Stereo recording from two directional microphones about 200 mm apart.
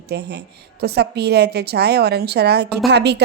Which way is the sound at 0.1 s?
55° right (ahead or behind).